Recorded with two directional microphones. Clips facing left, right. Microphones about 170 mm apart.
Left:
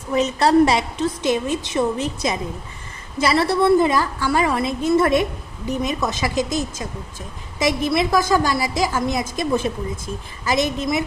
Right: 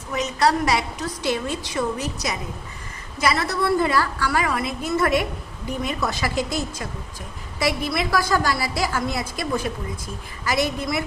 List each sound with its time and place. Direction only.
0.1 s a woman's voice: 30° left (ahead or behind)
3.2 s a woman's voice: 30° left (ahead or behind)